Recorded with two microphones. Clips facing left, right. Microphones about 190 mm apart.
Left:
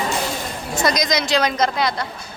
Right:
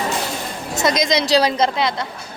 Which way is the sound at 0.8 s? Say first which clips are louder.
Right 2 dB; 25° right (ahead or behind).